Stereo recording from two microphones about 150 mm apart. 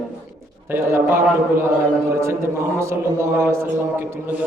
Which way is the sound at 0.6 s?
15° right (ahead or behind).